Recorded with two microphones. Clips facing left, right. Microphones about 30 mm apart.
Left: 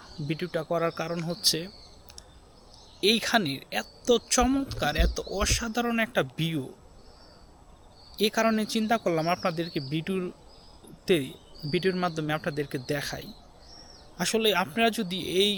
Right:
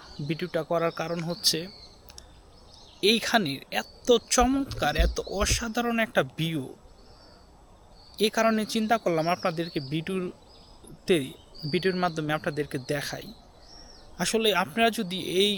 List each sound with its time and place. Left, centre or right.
0.3 s speech: centre
3.0 s speech: centre
8.1 s speech: centre